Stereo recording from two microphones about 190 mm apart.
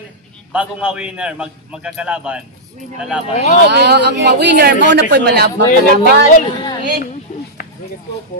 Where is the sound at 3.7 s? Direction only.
60° right (ahead or behind).